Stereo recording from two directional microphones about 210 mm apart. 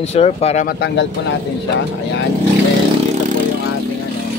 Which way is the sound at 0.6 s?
55° left (ahead or behind).